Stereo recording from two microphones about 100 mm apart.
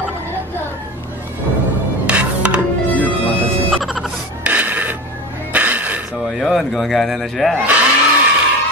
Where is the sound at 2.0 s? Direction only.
10° right (ahead or behind).